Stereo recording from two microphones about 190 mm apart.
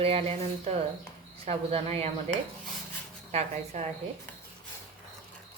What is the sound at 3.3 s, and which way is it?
Speech, 35° right (ahead or behind).